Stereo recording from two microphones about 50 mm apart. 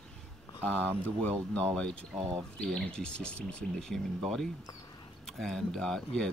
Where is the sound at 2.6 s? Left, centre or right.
Centre.